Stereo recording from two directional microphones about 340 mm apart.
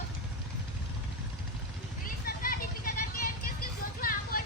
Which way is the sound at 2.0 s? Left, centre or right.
Left.